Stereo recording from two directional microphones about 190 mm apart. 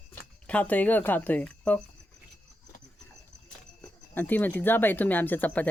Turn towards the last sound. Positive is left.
turn(degrees=10)  # may be behind; listen again after turning